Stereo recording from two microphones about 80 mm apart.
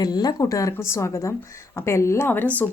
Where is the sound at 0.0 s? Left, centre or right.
Left.